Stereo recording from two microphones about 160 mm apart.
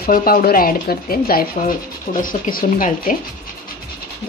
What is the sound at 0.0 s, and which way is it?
Speech, 65° left (ahead or behind).